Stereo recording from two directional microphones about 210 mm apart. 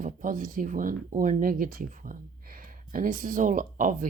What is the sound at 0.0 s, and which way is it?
Speech, 40° right (ahead or behind).